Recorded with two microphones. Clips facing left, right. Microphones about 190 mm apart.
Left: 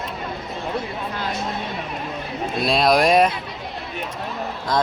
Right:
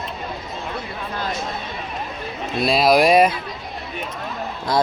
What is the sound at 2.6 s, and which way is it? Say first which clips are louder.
Speech: right 2 dB; centre (ahead or behind).